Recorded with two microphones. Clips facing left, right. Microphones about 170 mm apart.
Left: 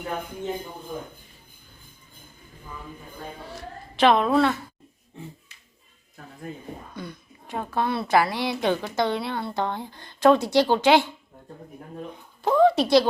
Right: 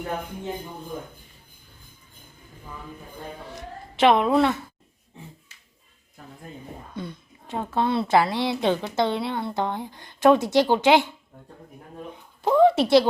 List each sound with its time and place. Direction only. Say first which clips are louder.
3.5 s a sound: even; 20° right (ahead or behind)
6.9 s a woman's voice: right 2 dB; 25° right (ahead or behind)
12.4 s a woman's voice: right 1 dB; 20° right (ahead or behind)